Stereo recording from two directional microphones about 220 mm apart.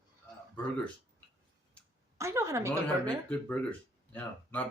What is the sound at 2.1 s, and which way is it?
Speech, 15° right (ahead or behind).